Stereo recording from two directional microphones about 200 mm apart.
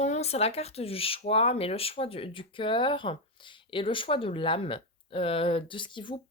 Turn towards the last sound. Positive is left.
turn(degrees=25)  # may be behind; listen again after turning